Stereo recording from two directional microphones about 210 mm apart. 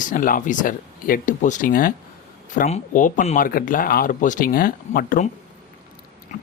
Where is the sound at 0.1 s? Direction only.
40° left (ahead or behind).